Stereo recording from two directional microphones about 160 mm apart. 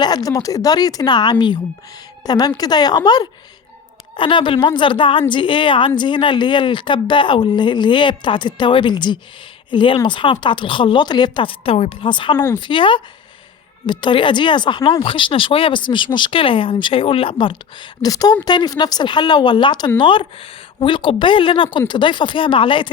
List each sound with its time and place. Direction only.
0.0 s a woman's voice: 25° left (ahead or behind)